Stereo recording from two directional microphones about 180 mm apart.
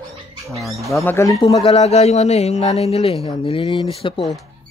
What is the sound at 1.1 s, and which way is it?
Speech, 15° left (ahead or behind).